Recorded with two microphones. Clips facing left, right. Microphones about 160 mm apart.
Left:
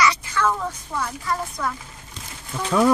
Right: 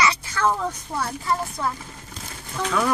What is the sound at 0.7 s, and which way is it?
A woman's voice, 30° right (ahead or behind).